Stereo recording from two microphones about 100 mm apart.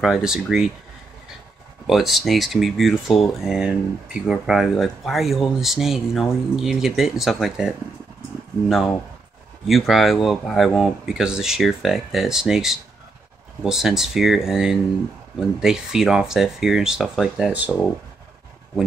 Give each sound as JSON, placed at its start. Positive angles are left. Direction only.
{"t": 0.0, "sound": "speech", "side_deg": 0}
{"t": 1.9, "sound": "speech", "side_deg": 0}
{"t": 17.5, "sound": "speech", "side_deg": -15}